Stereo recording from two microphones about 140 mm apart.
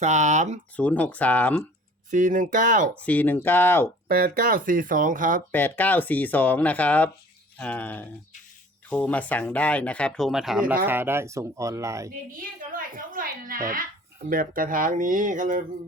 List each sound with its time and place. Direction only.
0.0 s speech: 60° right (ahead or behind)
0.8 s speech: 10° left (ahead or behind)
2.0 s speech: 70° right (ahead or behind)
3.0 s speech: 10° left (ahead or behind)
4.1 s speech: 85° right
5.5 s speech: 15° left (ahead or behind); by 10.8 s 5° right (ahead or behind)
10.8 s speech: 15° right (ahead or behind)
12.7 s a woman's voice: 80° right